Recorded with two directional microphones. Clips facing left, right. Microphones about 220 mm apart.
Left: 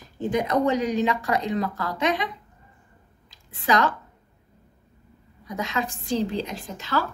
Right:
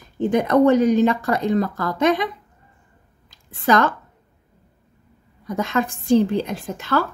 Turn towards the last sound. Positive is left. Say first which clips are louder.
# right 5 dB
turn(degrees=-50)  # may be behind; listen again after turning